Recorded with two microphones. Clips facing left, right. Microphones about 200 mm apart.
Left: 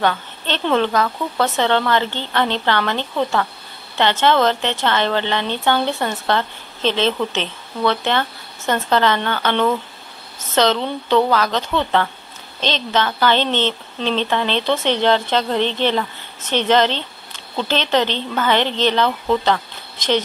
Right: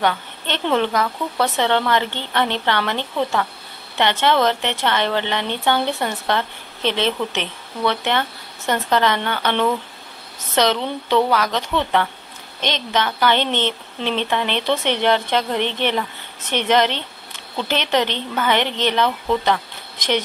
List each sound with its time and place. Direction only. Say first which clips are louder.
0.0 s a woman's voice: left 1 dB; 15° right (ahead or behind)